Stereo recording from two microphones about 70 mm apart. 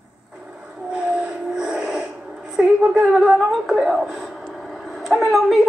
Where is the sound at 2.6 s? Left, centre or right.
Right.